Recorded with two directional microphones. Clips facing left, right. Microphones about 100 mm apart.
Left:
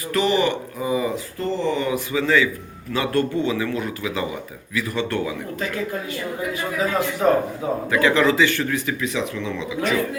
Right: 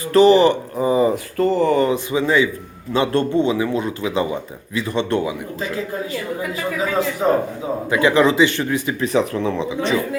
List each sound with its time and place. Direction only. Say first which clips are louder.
0.1 s speech: right 8 dB; 35° right (ahead or behind)
1.1 s speech: right 7 dB; 55° right (ahead or behind)
1.9 s a man's voice: right 2 dB; 20° right (ahead or behind)
7.2 s a man's voice: left 2 dB; 20° right (ahead or behind)
9.0 s speech: right 6 dB; 40° right (ahead or behind)